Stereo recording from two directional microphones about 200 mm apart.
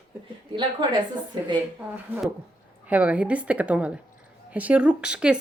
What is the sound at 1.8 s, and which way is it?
Speech, 10° right (ahead or behind).